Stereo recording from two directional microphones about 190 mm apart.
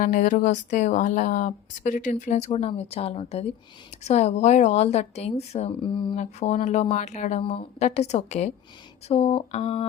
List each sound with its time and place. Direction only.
0.0 s speech: 45° left (ahead or behind)